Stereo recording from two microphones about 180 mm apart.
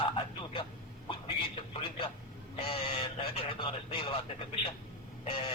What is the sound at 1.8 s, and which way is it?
Speech, 25° left (ahead or behind).